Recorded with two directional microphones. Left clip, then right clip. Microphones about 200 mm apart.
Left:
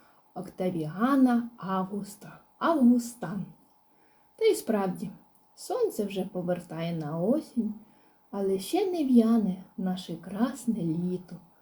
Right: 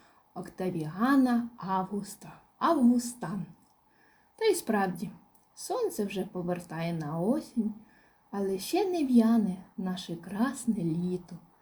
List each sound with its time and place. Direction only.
0.5 s speech: 40° right (ahead or behind)
4.4 s speech: 45° right (ahead or behind)